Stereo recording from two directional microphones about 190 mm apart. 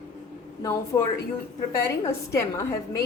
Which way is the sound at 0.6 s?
15° left (ahead or behind).